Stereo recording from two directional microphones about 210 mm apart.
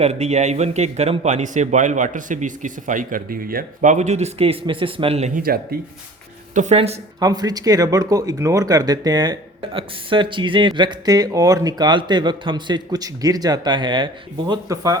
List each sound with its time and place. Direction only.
0.0 s a man's voice: 30° right (ahead or behind)
7.2 s speech: 20° right (ahead or behind)